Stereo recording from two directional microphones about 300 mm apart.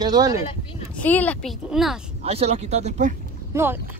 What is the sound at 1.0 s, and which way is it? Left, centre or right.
Speech, centre.